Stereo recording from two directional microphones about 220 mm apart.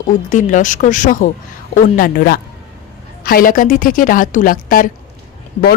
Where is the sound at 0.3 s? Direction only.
35° left (ahead or behind).